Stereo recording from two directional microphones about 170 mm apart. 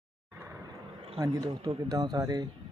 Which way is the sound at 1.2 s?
15° right (ahead or behind).